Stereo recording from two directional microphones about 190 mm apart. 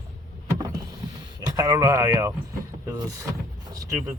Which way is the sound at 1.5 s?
20° right (ahead or behind).